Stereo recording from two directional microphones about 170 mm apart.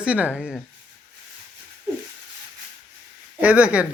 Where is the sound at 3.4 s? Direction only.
10° right (ahead or behind).